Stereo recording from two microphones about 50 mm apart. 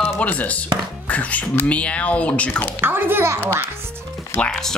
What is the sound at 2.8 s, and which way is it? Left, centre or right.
Speech, right.